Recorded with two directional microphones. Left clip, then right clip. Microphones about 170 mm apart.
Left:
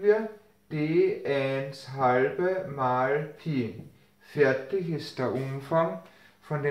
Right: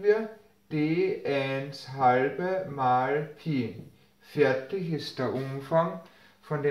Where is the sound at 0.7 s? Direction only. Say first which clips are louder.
Left 2 dB; 10° left (ahead or behind).